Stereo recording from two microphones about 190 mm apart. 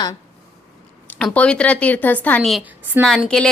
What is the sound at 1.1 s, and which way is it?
A woman's voice, 5° left (ahead or behind).